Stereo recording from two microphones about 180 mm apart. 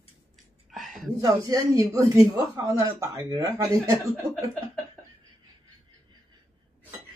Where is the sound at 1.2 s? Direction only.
20° right (ahead or behind).